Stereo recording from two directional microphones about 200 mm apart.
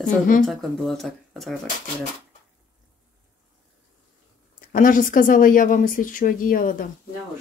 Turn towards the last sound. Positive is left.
turn(degrees=45)  # may be behind; listen again after turning